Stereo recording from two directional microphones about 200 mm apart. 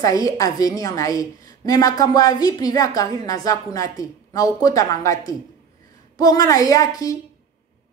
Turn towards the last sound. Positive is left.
turn(degrees=15)  # may be behind; listen again after turning